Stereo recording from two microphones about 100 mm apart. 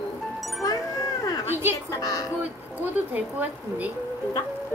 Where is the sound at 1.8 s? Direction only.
35° left (ahead or behind).